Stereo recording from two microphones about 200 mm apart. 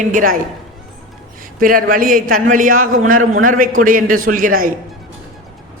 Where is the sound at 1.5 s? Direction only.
45° right (ahead or behind).